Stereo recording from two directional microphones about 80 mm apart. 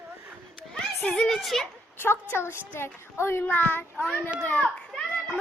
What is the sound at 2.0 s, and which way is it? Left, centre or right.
A woman's voice, left.